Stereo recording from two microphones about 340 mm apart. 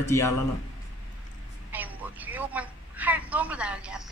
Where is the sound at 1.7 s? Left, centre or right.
Centre.